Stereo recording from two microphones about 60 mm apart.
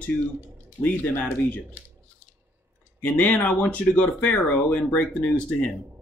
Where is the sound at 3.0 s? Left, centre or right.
Left.